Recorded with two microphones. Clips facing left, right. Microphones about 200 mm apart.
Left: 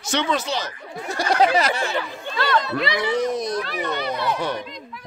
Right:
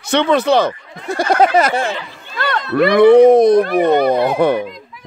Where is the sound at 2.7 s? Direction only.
55° right (ahead or behind).